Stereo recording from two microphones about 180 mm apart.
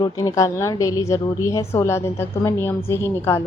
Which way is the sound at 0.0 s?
20° left (ahead or behind).